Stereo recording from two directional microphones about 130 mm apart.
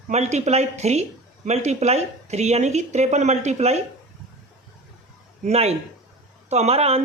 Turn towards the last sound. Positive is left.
turn(degrees=-50)  # may be behind; listen again after turning